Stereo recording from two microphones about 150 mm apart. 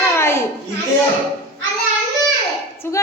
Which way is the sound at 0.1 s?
15° left (ahead or behind).